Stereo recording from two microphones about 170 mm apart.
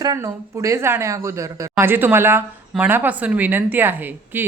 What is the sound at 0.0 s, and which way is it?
Speech, 20° right (ahead or behind).